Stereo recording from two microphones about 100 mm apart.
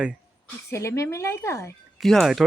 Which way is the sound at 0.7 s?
30° left (ahead or behind).